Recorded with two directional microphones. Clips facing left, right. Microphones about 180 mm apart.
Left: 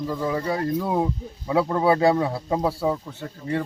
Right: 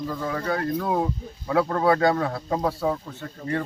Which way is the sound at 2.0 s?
25° left (ahead or behind).